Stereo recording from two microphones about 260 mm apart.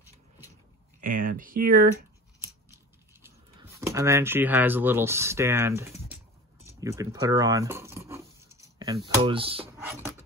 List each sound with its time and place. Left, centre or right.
1.0 s speech: right
2.4 s scissors: centre
6.8 s speech: centre